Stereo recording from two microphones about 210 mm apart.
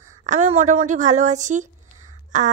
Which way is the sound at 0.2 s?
35° right (ahead or behind).